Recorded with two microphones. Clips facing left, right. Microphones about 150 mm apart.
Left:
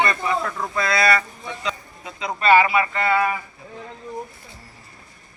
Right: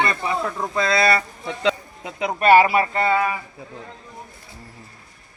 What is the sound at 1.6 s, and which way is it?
Speech, 75° right (ahead or behind).